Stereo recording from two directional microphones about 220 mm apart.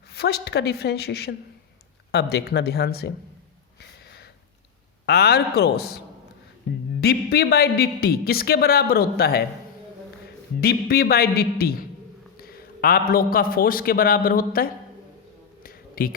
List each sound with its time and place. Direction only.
0.1 s a woman's voice: 45° left (ahead or behind)
3.8 s a sound: 45° left (ahead or behind)
5.0 s a woman's voice: 45° left (ahead or behind)
7.0 s a woman's voice: 45° left (ahead or behind)
10.6 s a woman's voice: 45° left (ahead or behind)
15.6 s finger snapping: 40° left (ahead or behind)